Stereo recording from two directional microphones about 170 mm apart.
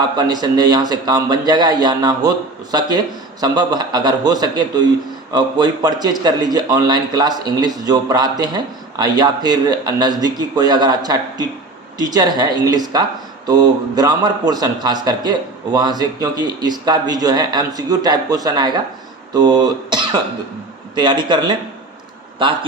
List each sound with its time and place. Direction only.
0.2 s a man's voice: 25° right (ahead or behind)
19.3 s a sound: 25° right (ahead or behind)
20.9 s a man's voice: 25° right (ahead or behind)